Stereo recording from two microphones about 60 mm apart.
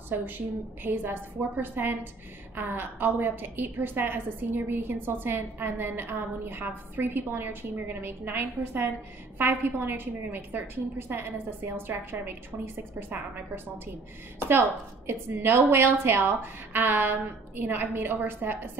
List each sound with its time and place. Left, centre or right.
0.1 s a woman's voice: right
15.0 s a woman's voice: right